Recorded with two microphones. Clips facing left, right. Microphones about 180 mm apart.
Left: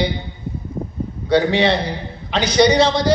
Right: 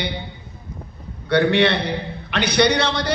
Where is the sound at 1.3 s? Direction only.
60° right (ahead or behind).